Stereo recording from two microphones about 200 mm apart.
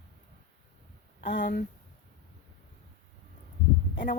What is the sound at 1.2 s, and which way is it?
Speech, 65° left (ahead or behind).